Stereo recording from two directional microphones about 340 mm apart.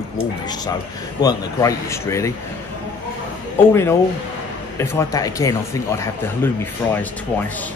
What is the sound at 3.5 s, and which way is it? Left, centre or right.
A man's voice, centre.